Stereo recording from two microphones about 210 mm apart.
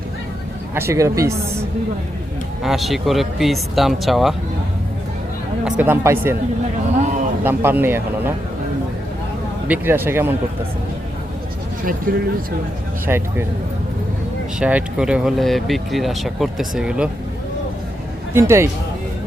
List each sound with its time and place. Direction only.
0.7 s speech: 10° right (ahead or behind)
2.6 s speech: centre (ahead or behind)
5.6 s speech: 5° right (ahead or behind)
7.4 s speech: 10° right (ahead or behind)
9.6 s speech: 10° right (ahead or behind)
12.1 s speech: 40° right (ahead or behind)
13.1 s speech: 10° right (ahead or behind)
14.6 s speech: 5° right (ahead or behind)
18.3 s speech: 15° right (ahead or behind)